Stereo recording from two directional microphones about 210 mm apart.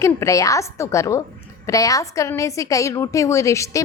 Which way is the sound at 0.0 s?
15° left (ahead or behind).